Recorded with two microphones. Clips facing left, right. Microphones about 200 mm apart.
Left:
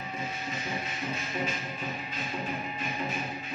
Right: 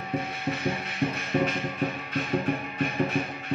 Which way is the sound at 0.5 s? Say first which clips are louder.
Right 6 dB; 60° right (ahead or behind).